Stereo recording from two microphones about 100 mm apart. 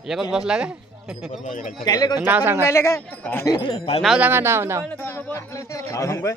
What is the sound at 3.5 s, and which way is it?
Speech, 50° left (ahead or behind).